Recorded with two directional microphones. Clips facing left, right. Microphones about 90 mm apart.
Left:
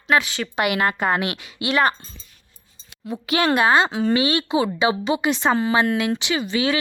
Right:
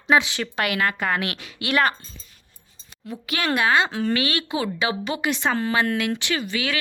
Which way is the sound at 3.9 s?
15° left (ahead or behind).